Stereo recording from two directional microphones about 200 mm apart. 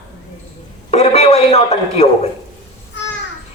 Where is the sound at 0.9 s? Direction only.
30° left (ahead or behind).